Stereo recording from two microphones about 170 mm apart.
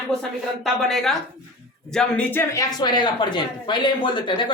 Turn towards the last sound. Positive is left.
turn(degrees=30)  # may be behind; listen again after turning